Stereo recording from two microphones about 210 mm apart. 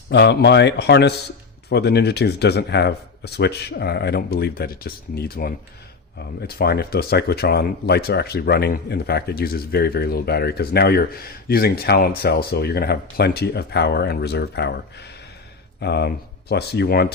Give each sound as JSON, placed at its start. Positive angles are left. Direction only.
{"t": 0.1, "sound": "speech", "side_deg": 55}